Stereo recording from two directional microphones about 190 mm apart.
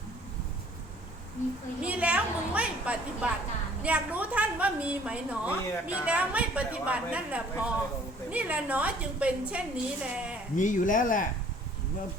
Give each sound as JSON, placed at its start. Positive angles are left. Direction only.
{"t": 1.8, "sound": "a sound", "side_deg": -5}
{"t": 3.8, "sound": "a woman's voice", "side_deg": -5}
{"t": 10.5, "sound": "speech", "side_deg": 40}